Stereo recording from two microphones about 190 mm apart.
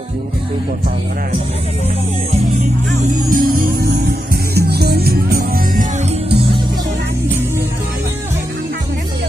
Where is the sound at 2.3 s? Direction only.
40° right (ahead or behind).